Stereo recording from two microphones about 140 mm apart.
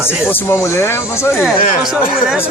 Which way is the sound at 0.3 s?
15° left (ahead or behind).